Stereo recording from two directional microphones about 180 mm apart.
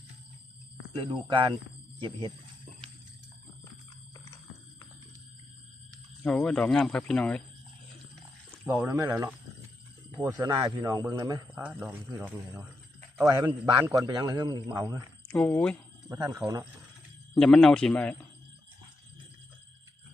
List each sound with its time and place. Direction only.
0.9 s speech: 30° right (ahead or behind)
6.2 s speech: 5° left (ahead or behind)
8.6 s speech: 10° right (ahead or behind)
11.6 s speech: 5° right (ahead or behind)
15.3 s speech: 10° left (ahead or behind)
16.0 s speech: 20° right (ahead or behind)
17.3 s speech: 5° left (ahead or behind)